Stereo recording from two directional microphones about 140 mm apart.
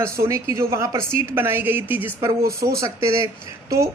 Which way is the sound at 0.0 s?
20° right (ahead or behind).